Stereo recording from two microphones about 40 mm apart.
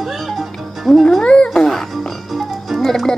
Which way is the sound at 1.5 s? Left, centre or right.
Centre.